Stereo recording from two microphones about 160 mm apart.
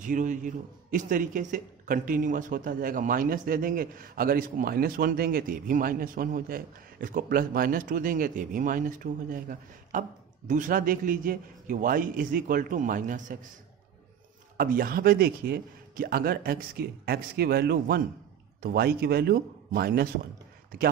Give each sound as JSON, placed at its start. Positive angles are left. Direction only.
{"t": 0.0, "sound": "a man's voice", "side_deg": -55}
{"t": 14.6, "sound": "speech", "side_deg": -65}